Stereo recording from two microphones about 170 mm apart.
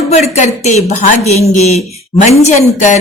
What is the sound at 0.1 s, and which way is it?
A woman's voice, 45° left (ahead or behind).